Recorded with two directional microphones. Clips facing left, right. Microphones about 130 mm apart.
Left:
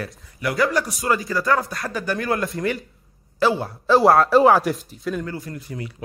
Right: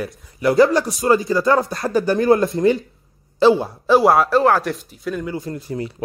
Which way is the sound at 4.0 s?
Centre (ahead or behind).